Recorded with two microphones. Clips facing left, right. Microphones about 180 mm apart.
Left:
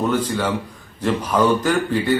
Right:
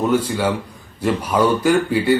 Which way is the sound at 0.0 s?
10° right (ahead or behind).